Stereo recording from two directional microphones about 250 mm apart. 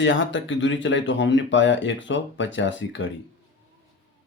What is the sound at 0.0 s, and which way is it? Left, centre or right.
Speech, left.